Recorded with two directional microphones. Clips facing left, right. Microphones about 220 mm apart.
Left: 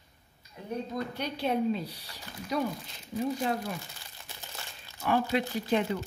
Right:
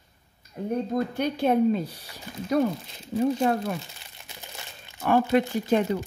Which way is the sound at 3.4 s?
60° right (ahead or behind).